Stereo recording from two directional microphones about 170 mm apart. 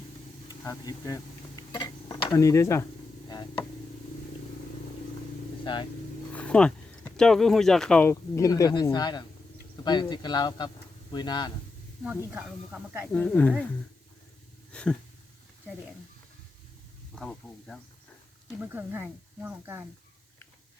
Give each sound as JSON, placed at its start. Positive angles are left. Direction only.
{"t": 0.6, "sound": "speech", "side_deg": 20}
{"t": 6.3, "sound": "speech", "side_deg": 5}
{"t": 8.1, "sound": "speech", "side_deg": 20}
{"t": 12.0, "sound": "speech", "side_deg": -10}
{"t": 13.1, "sound": "speech", "side_deg": 10}
{"t": 14.7, "sound": "a sound", "side_deg": 5}
{"t": 17.2, "sound": "speech", "side_deg": 5}
{"t": 18.6, "sound": "speech", "side_deg": -10}